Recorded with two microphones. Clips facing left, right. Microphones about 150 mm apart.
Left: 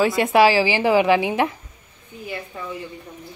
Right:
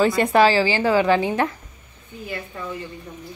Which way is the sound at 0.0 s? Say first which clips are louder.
Even; 5° left (ahead or behind).